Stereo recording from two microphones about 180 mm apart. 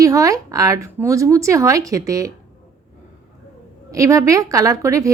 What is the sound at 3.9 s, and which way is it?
Speech, 20° right (ahead or behind).